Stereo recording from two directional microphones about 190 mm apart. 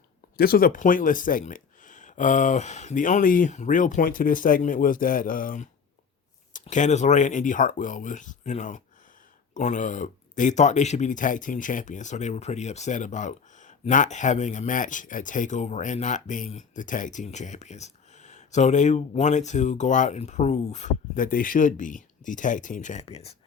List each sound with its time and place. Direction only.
0.3 s speech: 50° left (ahead or behind); by 23.3 s 35° left (ahead or behind)